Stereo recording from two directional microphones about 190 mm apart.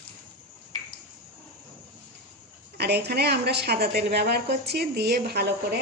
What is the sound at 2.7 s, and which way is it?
A woman's voice, 60° right (ahead or behind).